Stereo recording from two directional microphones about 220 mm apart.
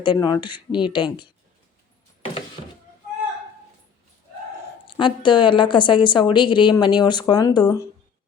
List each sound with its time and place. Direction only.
0.0 s a woman's voice: 20° left (ahead or behind)
4.9 s a woman's voice: 20° left (ahead or behind)